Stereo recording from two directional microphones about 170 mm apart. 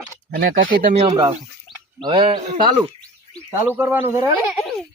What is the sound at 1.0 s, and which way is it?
Speech, 25° right (ahead or behind).